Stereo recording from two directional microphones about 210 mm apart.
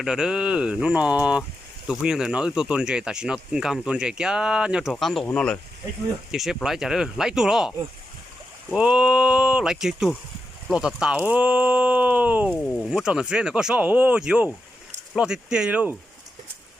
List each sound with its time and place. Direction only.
0.0 s speech: centre (ahead or behind)
8.7 s speech: 5° right (ahead or behind)
12.5 s speech: 5° left (ahead or behind)